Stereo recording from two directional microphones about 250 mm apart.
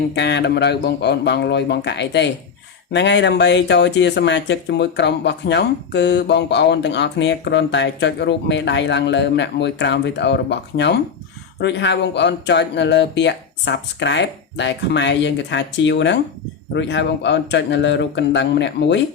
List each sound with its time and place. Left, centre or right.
0.1 s speech: left